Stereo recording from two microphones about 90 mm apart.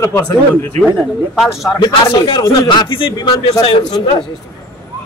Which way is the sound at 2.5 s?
65° left (ahead or behind).